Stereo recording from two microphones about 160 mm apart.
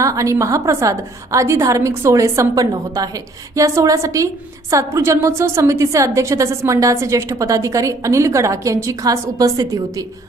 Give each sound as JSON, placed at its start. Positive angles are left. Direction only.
{"t": 0.0, "sound": "a woman's voice", "side_deg": -20}